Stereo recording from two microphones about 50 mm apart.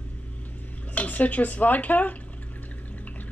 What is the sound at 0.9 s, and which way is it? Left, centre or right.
Speech, left.